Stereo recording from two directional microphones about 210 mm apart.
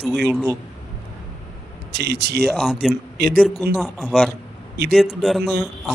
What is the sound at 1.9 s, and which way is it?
Speech, 50° right (ahead or behind).